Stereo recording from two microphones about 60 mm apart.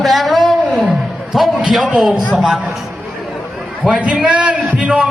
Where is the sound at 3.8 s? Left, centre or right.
Right.